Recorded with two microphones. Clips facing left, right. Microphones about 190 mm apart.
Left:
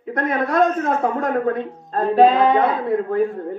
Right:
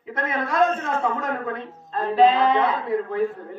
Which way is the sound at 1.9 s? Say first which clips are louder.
Left 4 dB; 50° left (ahead or behind).